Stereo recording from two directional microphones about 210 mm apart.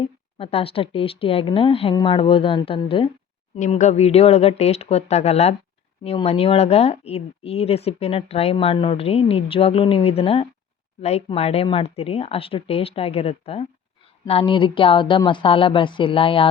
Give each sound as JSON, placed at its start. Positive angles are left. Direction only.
{"t": 0.0, "sound": "speech", "side_deg": 25}